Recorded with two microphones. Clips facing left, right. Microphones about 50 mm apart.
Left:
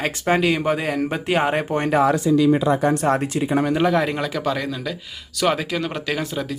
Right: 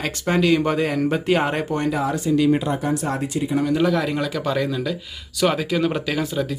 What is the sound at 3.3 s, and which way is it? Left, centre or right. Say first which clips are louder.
Speech: left 2 dB; left.